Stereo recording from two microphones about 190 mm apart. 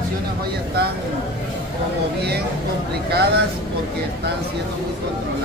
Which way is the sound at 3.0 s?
55° right (ahead or behind).